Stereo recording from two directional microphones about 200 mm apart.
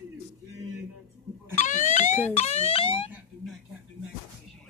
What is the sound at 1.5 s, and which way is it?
Fire alarm, 40° left (ahead or behind).